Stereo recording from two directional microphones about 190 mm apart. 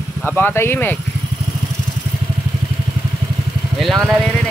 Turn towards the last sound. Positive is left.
turn(degrees=0)  # may be behind; listen again after turning